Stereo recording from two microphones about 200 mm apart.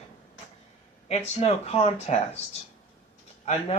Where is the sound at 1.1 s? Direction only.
30° left (ahead or behind).